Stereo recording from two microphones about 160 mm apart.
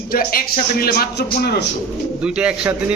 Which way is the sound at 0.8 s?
75° left (ahead or behind).